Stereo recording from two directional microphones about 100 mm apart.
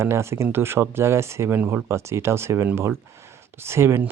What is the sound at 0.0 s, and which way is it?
Speech, 25° right (ahead or behind).